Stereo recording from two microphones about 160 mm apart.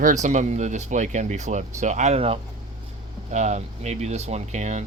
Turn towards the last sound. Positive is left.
turn(degrees=-50)  # may be behind; listen again after turning